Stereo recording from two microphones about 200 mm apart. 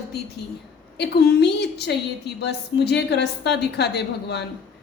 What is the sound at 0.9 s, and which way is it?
A woman's voice, 55° left (ahead or behind).